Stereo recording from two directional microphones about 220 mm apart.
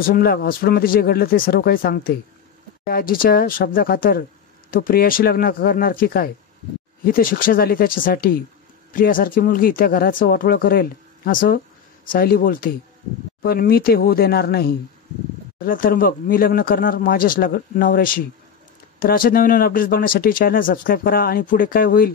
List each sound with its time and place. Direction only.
0.0 s speech: 40° left (ahead or behind)